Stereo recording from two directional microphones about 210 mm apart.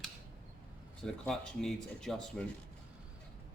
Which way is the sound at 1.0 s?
5° left (ahead or behind).